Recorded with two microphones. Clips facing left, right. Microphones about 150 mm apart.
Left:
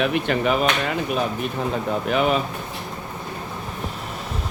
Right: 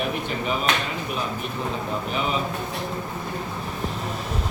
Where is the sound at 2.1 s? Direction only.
70° left (ahead or behind).